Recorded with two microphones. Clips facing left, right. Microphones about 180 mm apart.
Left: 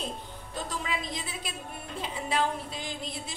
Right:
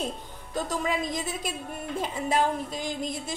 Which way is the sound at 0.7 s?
45° right (ahead or behind).